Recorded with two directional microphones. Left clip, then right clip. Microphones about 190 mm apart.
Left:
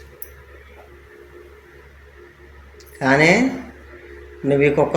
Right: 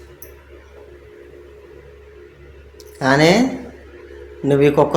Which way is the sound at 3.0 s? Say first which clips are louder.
Right 1 dB; 15° right (ahead or behind).